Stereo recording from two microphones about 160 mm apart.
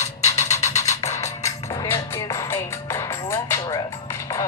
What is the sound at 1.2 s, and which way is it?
Music, 20° left (ahead or behind).